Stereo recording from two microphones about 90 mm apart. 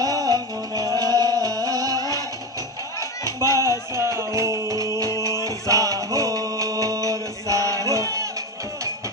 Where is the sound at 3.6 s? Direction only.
30° right (ahead or behind).